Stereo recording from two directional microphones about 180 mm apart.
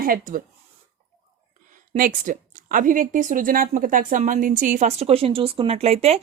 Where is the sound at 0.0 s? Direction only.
50° right (ahead or behind).